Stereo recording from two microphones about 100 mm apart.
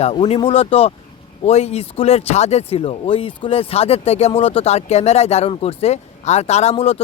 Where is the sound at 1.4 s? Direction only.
90° left.